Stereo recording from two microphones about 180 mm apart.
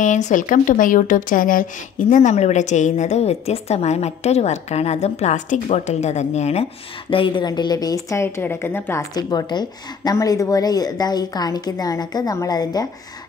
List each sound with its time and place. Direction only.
0.0 s a woman's voice: 45° left (ahead or behind); by 12.8 s 20° left (ahead or behind)